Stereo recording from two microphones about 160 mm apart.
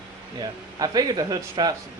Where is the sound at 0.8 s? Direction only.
25° right (ahead or behind).